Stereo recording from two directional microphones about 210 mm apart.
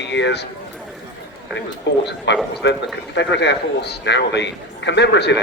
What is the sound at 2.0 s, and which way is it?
A man's voice, 55° left (ahead or behind).